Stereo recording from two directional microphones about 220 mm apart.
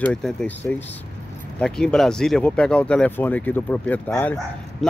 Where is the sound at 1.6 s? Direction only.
5° left (ahead or behind).